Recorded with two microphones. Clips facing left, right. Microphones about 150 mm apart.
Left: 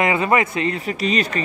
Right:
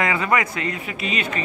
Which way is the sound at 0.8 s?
40° left (ahead or behind).